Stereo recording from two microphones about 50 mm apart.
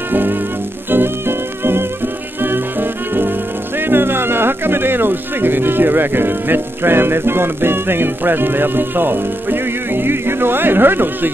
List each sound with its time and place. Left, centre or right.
0.1 s music: right
3.8 s speech: right